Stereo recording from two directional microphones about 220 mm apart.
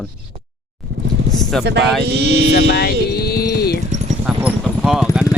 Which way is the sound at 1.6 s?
50° right (ahead or behind).